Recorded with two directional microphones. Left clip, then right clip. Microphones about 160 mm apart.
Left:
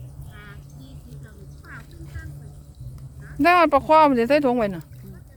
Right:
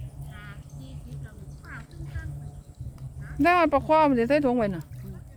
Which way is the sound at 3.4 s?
20° left (ahead or behind).